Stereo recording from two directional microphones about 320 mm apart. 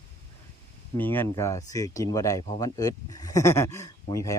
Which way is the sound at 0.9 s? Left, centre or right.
Centre.